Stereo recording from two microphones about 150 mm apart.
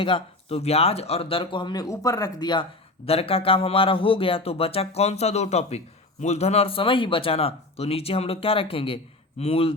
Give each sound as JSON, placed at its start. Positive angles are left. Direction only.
{"t": 0.0, "sound": "speech", "side_deg": 40}
{"t": 3.1, "sound": "speech", "side_deg": 40}